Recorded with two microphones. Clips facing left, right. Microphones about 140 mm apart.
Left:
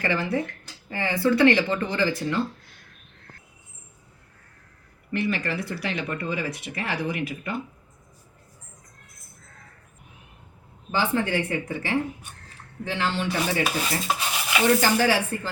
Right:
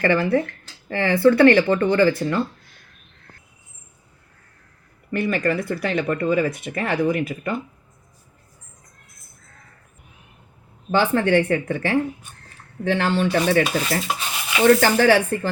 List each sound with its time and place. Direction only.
0.0 s speech: 60° right (ahead or behind)
0.9 s speech: 70° right (ahead or behind)
5.1 s speech: 50° right (ahead or behind)
10.9 s speech: 65° right (ahead or behind)